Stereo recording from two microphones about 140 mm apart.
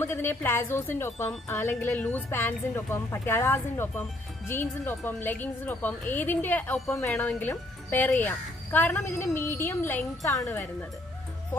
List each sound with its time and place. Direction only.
0.0 s a woman's voice: 15° left (ahead or behind)
1.9 s a woman's voice: 5° left (ahead or behind); by 10.6 s 25° left (ahead or behind)